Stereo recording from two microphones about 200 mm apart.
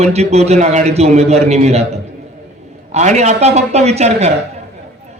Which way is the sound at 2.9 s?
35° right (ahead or behind).